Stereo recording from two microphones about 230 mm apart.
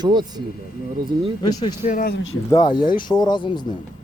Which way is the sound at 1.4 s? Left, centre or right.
Centre.